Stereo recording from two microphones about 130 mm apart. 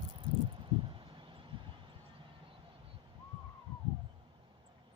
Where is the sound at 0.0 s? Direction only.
40° right (ahead or behind).